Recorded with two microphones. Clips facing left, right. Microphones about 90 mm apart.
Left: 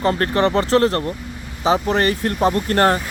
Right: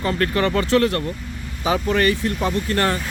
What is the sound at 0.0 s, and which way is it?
Speech, 35° left (ahead or behind).